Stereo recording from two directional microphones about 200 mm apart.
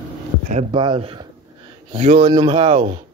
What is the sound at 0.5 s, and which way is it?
A man's voice, 30° right (ahead or behind).